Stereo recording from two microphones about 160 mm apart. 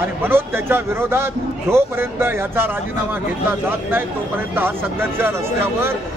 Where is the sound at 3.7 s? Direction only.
15° right (ahead or behind).